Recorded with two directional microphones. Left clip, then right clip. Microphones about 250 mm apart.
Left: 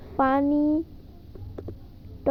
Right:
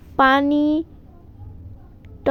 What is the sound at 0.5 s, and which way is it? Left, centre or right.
Speech, right.